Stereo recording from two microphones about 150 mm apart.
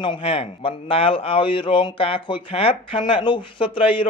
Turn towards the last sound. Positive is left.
turn(degrees=35)  # may be behind; listen again after turning